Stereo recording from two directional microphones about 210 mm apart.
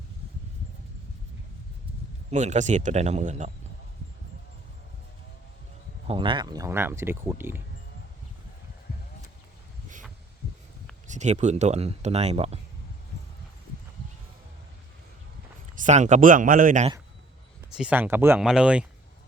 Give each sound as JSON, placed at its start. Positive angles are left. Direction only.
{"t": 2.3, "sound": "speech", "side_deg": -35}
{"t": 6.1, "sound": "speech", "side_deg": -25}
{"t": 11.1, "sound": "speech", "side_deg": -35}
{"t": 15.7, "sound": "speech", "side_deg": -35}
{"t": 17.7, "sound": "speech", "side_deg": -5}